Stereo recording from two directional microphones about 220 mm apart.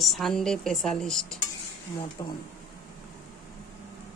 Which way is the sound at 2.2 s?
15° left (ahead or behind).